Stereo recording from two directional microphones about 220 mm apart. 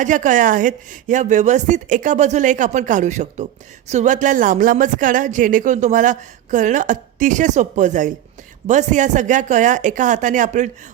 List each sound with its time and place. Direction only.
0.0 s speech: 35° right (ahead or behind)